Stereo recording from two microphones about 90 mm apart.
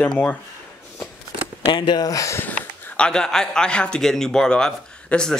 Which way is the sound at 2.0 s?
35° left (ahead or behind).